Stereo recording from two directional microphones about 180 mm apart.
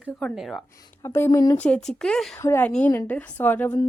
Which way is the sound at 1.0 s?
15° left (ahead or behind).